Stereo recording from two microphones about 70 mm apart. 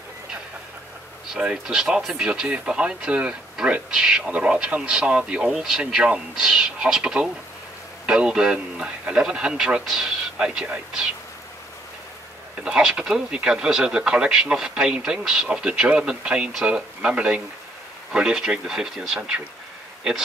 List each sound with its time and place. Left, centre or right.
1.4 s speech: centre
12.6 s speech: centre